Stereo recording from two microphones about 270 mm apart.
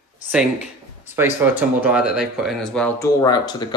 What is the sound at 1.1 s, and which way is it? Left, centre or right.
Speech, centre.